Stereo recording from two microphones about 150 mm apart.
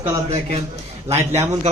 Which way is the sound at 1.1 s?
45° right (ahead or behind).